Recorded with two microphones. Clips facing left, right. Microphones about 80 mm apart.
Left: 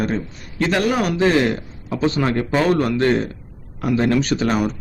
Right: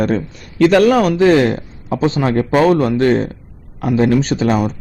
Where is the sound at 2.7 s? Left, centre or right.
Right.